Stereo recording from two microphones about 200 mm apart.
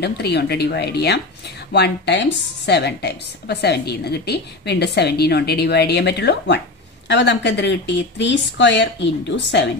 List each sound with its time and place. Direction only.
0.0 s a woman's voice: 55° left (ahead or behind)